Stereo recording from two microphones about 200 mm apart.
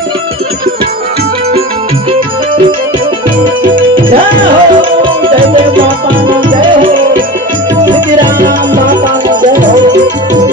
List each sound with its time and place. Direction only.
4.3 s music: 25° right (ahead or behind)
6.6 s music: 25° right (ahead or behind)
8.4 s music: 45° right (ahead or behind)